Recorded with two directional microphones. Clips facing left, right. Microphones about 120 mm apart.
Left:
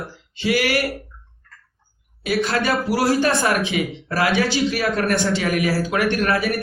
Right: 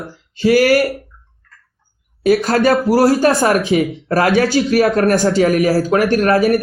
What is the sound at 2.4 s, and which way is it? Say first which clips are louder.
Speech: right 7 dB; 45° right (ahead or behind).